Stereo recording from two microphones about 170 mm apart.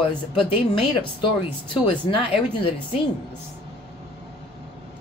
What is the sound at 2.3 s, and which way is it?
Speech, 35° left (ahead or behind).